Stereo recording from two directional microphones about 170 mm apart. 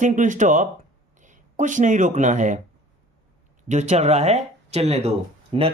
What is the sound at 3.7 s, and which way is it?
Speech, 40° right (ahead or behind).